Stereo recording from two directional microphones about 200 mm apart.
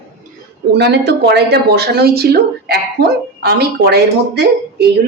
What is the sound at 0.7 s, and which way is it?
Speech, 55° right (ahead or behind).